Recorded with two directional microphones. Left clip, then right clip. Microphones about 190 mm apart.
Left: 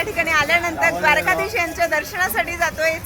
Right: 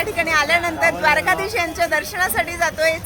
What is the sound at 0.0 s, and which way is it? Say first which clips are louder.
Speech: even; 5° left (ahead or behind).